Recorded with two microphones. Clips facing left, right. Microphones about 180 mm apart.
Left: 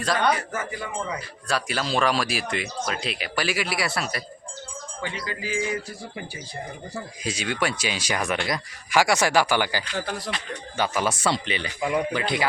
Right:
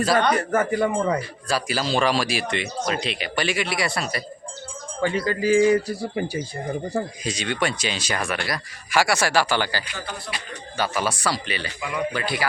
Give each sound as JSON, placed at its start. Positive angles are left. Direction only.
{"t": 0.3, "sound": "speech", "side_deg": -55}
{"t": 1.5, "sound": "speech", "side_deg": 0}
{"t": 5.0, "sound": "speech", "side_deg": -45}
{"t": 7.3, "sound": "speech", "side_deg": 5}
{"t": 11.8, "sound": "speech", "side_deg": 45}
{"t": 12.1, "sound": "speech", "side_deg": 20}